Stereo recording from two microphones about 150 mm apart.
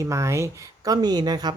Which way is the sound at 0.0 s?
20° right (ahead or behind).